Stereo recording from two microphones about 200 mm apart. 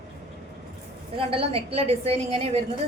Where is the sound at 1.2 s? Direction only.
25° right (ahead or behind).